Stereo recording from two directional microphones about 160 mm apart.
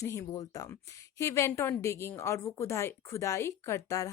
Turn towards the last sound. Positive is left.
turn(degrees=20)  # may be behind; listen again after turning